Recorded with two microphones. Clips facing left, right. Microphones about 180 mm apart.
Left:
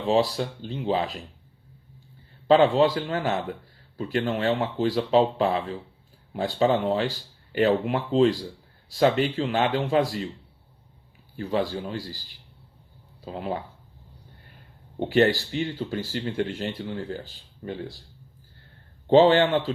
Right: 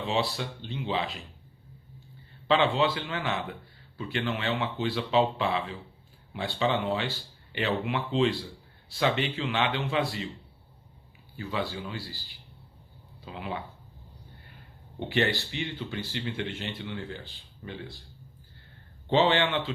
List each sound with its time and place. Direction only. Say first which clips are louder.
0.0 s speech: left 7 dB; 40° left (ahead or behind)
2.5 s speech: left 6 dB; 40° left (ahead or behind)
11.3 s a man's voice: left 6 dB; 45° left (ahead or behind)
14.9 s speech: left 7 dB; 40° left (ahead or behind)
19.1 s speech: left 7 dB; 40° left (ahead or behind)